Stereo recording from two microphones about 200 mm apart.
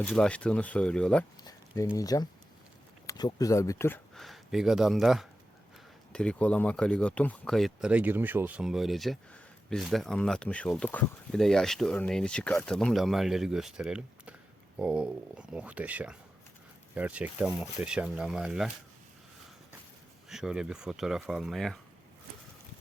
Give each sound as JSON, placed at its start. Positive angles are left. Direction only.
{"t": 0.0, "sound": "speech", "side_deg": 5}
{"t": 1.5, "sound": "a sound", "side_deg": 15}
{"t": 2.0, "sound": "speech", "side_deg": 20}
{"t": 20.3, "sound": "speech", "side_deg": -5}